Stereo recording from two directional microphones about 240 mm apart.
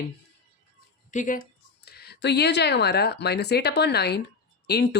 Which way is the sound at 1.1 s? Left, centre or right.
Left.